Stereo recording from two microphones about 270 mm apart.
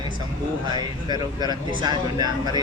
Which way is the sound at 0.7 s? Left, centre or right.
Centre.